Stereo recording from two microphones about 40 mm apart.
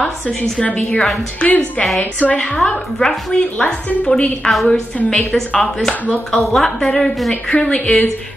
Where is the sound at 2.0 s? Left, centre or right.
Left.